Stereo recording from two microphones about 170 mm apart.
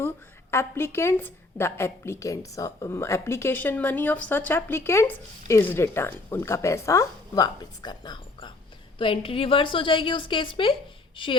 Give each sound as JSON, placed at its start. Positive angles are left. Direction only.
{"t": 0.5, "sound": "a woman's voice", "side_deg": 15}